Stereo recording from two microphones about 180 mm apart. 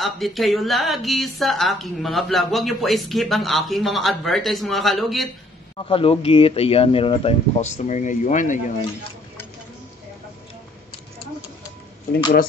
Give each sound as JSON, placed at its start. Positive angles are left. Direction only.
{"t": 0.0, "sound": "speech", "side_deg": 0}
{"t": 5.8, "sound": "speech", "side_deg": 30}